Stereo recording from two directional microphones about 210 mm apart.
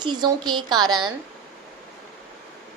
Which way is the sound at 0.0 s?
20° right (ahead or behind).